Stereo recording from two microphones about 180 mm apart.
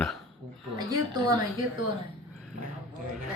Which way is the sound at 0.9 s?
25° right (ahead or behind).